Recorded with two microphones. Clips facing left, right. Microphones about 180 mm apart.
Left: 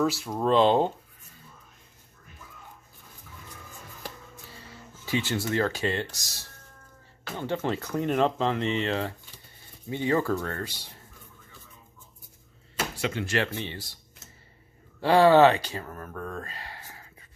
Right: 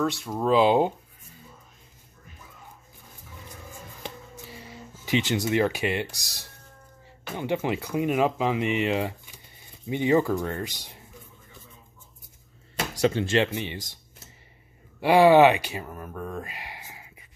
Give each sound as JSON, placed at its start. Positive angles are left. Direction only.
{"t": 0.0, "sound": "speech", "side_deg": 0}
{"t": 4.0, "sound": "a sound", "side_deg": -15}
{"t": 7.2, "sound": "speech", "side_deg": -15}
{"t": 13.0, "sound": "speech", "side_deg": -30}
{"t": 15.0, "sound": "speech", "side_deg": -15}